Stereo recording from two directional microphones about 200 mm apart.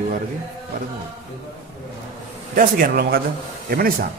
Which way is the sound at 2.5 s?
45° right (ahead or behind).